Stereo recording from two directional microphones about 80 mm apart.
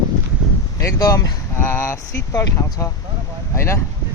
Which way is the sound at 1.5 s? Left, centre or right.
Left.